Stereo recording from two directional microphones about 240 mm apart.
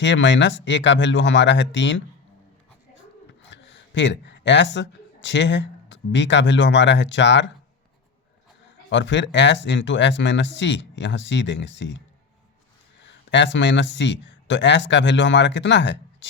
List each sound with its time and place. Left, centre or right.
0.0 s speech: left
3.5 s speech: left
8.9 s speech: left